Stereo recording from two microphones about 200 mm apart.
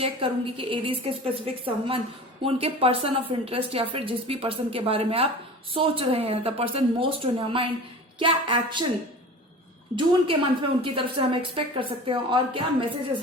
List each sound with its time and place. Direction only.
0.0 s a woman's voice: 25° right (ahead or behind)
9.9 s a woman's voice: 25° right (ahead or behind)